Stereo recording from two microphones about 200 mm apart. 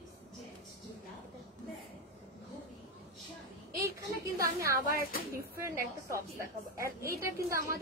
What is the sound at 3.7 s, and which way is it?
A woman's voice, 15° right (ahead or behind).